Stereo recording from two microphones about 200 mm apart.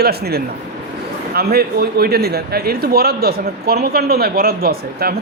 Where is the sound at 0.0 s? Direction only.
50° right (ahead or behind).